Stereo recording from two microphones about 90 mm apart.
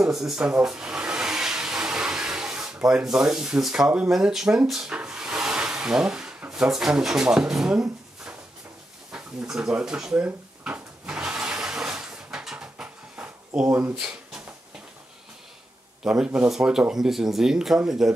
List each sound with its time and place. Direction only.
0.0 s speech: 5° right (ahead or behind)
0.5 s a sound: 10° right (ahead or behind)
9.1 s drawer open or close: 5° right (ahead or behind)
13.6 s speech: 20° right (ahead or behind)
13.9 s a sound: 10° right (ahead or behind)
16.0 s a man's voice: 10° right (ahead or behind)